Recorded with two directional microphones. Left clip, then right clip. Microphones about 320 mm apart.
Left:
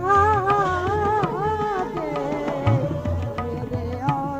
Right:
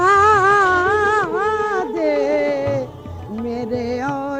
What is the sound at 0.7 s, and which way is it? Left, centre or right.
Music, right.